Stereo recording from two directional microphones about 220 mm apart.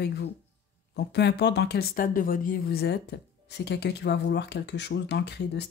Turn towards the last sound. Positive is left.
turn(degrees=50)  # may be behind; listen again after turning